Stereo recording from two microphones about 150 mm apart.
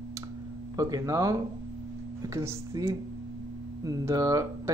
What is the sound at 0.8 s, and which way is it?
Speech, 25° right (ahead or behind).